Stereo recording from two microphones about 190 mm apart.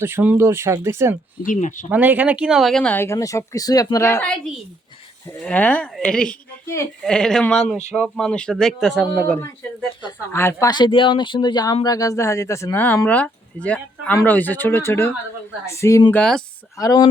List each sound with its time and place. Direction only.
0.0 s speech: 10° right (ahead or behind)
1.4 s speech: 40° left (ahead or behind)
1.9 s speech: 10° right (ahead or behind); by 4.2 s 15° left (ahead or behind)
5.4 s a woman's voice: 5° left (ahead or behind)